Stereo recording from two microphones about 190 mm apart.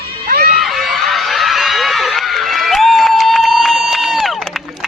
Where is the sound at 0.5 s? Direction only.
Centre (ahead or behind).